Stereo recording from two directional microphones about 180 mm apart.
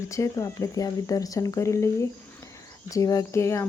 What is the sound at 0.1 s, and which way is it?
Speech, 15° left (ahead or behind).